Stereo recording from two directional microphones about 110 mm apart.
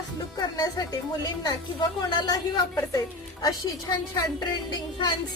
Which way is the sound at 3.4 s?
35° left (ahead or behind).